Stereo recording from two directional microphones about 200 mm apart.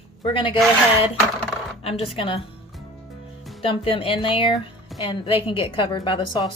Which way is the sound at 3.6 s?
25° left (ahead or behind).